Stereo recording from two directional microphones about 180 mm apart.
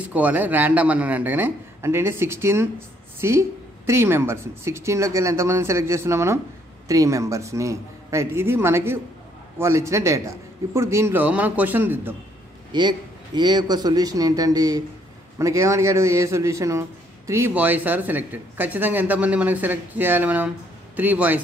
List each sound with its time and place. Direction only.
0.0 s speech: 10° right (ahead or behind)
12.7 s a man's voice: 25° right (ahead or behind)